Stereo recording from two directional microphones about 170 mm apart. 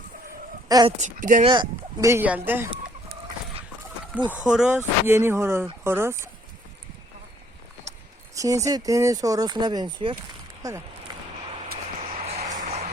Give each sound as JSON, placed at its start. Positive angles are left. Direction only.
{"t": 0.9, "sound": "speech", "side_deg": -45}
{"t": 1.5, "sound": "speech", "side_deg": -25}
{"t": 2.0, "sound": "speech", "side_deg": -10}
{"t": 4.3, "sound": "speech", "side_deg": -5}
{"t": 8.4, "sound": "speech", "side_deg": -20}
{"t": 10.6, "sound": "speech", "side_deg": -15}
{"t": 12.2, "sound": "a sound", "side_deg": -40}